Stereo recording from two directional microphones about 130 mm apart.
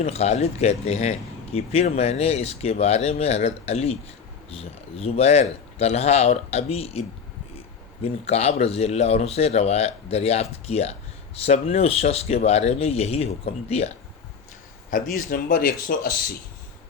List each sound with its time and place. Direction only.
0.0 s speech: 55° left (ahead or behind)
8.0 s speech: 55° left (ahead or behind)
15.1 s speech: 90° left